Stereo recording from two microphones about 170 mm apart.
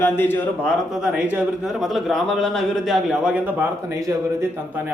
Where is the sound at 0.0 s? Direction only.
10° left (ahead or behind).